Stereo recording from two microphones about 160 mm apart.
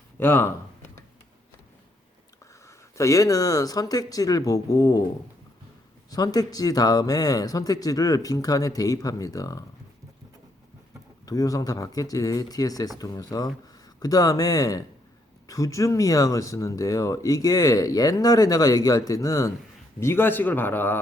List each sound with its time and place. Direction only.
0.2 s speech: 15° left (ahead or behind)
2.6 s speech: 20° left (ahead or behind)
6.1 s speech: 25° left (ahead or behind)
11.3 s a man's voice: 20° left (ahead or behind)